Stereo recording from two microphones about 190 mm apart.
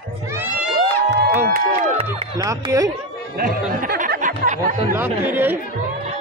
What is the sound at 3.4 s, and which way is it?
Speech, 50° right (ahead or behind).